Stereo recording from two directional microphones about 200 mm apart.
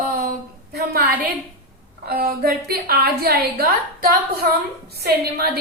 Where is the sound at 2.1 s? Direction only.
50° right (ahead or behind).